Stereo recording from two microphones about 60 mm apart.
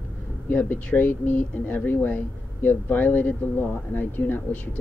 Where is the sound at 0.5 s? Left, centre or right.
Left.